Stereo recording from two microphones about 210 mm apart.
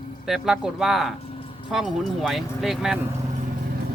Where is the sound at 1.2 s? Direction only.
25° left (ahead or behind).